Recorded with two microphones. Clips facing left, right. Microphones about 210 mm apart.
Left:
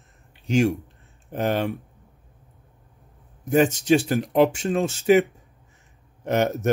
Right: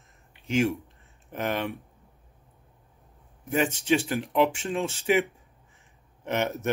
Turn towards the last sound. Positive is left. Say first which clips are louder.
# left 6 dB
turn(degrees=40)  # may be behind; listen again after turning